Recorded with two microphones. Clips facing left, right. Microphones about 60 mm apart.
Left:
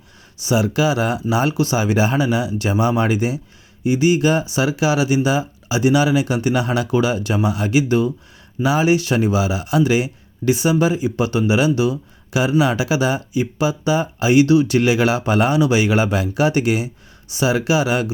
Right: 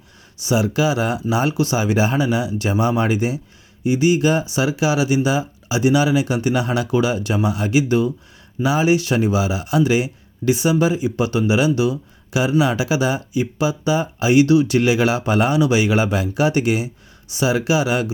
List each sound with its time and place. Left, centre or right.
0.3 s speech: left
3.8 s speech: left
14.8 s speech: left
17.3 s speech: left